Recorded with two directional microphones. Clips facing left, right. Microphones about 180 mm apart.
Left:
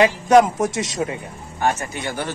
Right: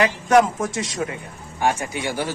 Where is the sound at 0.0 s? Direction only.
20° left (ahead or behind).